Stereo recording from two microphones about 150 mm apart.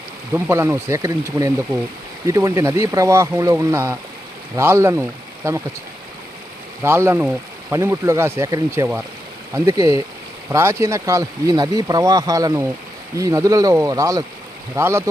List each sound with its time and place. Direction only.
0.3 s speech: 15° right (ahead or behind)
6.8 s speech: 15° right (ahead or behind)